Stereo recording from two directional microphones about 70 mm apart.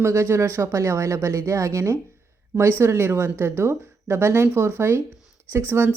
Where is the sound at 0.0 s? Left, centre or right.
Right.